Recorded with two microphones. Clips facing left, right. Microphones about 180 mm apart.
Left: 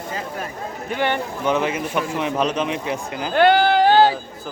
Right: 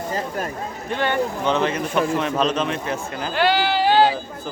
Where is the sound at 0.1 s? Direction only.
45° right (ahead or behind).